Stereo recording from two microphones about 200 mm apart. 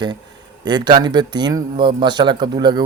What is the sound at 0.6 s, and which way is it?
A man's voice, 20° right (ahead or behind).